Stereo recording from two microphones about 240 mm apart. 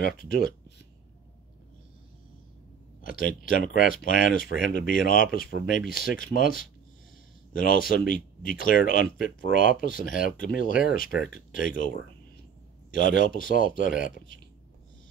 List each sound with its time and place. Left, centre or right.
0.0 s speech: left
3.0 s speech: left